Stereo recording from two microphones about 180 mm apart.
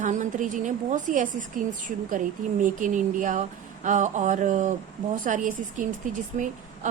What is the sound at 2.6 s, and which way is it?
A woman's voice, 45° right (ahead or behind).